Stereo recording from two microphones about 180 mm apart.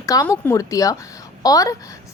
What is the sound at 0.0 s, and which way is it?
A woman's voice, 20° left (ahead or behind).